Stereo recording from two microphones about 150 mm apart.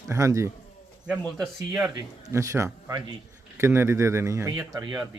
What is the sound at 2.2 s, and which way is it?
A man's voice, 20° right (ahead or behind).